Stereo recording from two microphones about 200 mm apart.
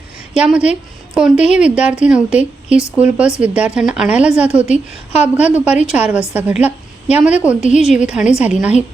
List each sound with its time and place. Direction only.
0.3 s a woman's voice: 5° right (ahead or behind)